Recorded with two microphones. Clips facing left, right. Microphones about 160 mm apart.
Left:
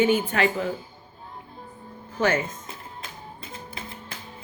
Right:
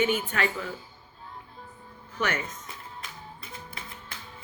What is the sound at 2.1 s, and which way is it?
Speech, 30° left (ahead or behind).